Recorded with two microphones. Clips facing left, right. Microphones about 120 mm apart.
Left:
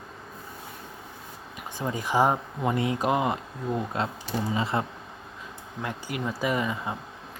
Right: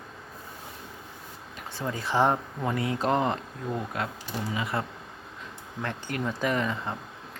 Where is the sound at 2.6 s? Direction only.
20° left (ahead or behind).